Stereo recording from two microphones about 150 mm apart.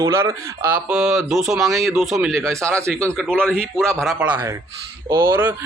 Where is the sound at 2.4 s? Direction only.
20° right (ahead or behind).